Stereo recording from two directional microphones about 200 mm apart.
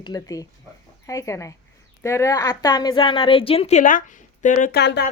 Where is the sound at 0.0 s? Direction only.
20° left (ahead or behind); by 4.8 s 40° left (ahead or behind).